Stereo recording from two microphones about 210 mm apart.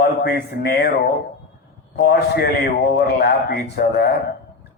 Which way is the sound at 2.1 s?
45° left (ahead or behind).